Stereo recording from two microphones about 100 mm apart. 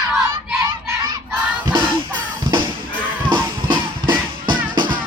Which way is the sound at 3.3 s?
50° right (ahead or behind).